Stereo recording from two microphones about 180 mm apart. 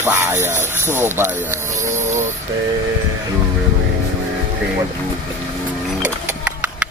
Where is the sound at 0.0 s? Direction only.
15° right (ahead or behind).